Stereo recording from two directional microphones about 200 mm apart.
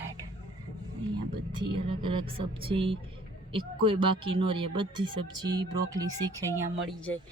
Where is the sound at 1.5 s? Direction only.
25° right (ahead or behind).